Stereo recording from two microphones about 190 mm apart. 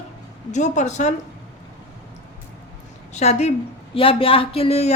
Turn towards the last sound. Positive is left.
turn(degrees=30)  # may be behind; listen again after turning